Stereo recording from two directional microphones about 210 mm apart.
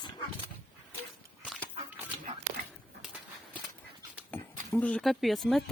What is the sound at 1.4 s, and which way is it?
Fowl, 5° left (ahead or behind).